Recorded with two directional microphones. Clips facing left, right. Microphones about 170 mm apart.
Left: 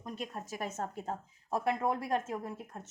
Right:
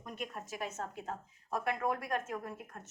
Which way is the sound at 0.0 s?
35° left (ahead or behind).